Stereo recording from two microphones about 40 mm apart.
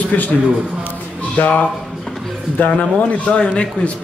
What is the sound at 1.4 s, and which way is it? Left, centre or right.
Speech, left.